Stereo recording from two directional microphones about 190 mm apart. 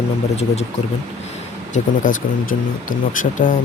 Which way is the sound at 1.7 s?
45° left (ahead or behind).